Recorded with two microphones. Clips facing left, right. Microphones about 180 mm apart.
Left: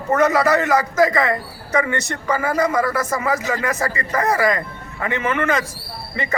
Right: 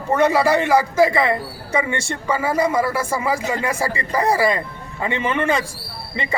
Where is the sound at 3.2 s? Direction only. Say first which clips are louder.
Even; 10° right (ahead or behind).